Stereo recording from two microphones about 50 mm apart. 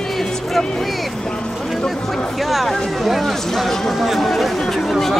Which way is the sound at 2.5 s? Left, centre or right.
Centre.